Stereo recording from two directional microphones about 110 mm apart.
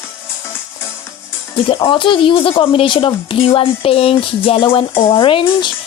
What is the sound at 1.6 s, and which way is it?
A woman's voice, 50° left (ahead or behind).